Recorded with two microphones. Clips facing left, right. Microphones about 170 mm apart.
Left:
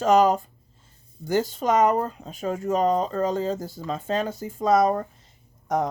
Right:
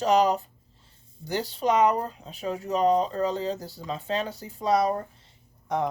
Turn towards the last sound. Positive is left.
turn(degrees=45)  # may be behind; listen again after turning